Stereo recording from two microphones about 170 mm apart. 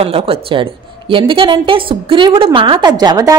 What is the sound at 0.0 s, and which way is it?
A woman's voice, 35° right (ahead or behind).